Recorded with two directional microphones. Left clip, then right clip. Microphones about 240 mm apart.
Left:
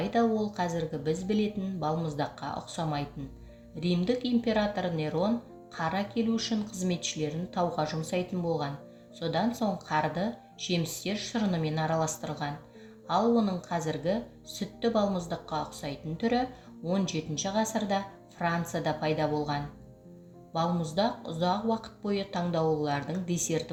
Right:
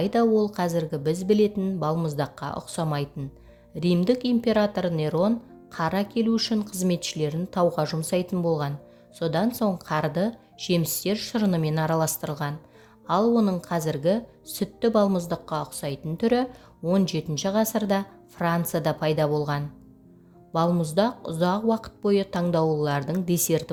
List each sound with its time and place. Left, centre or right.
0.0 s speech: right